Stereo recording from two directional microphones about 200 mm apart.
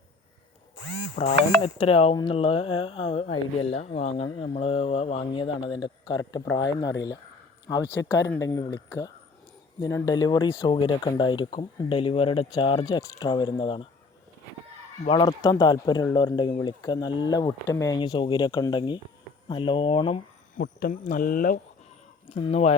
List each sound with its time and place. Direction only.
1.6 s speech: 30° left (ahead or behind)
15.0 s speech: 25° left (ahead or behind)
20.6 s speech: 45° left (ahead or behind)
22.4 s speech: 30° left (ahead or behind)